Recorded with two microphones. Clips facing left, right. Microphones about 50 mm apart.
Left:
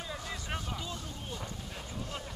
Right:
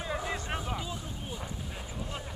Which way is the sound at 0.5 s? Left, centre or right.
Centre.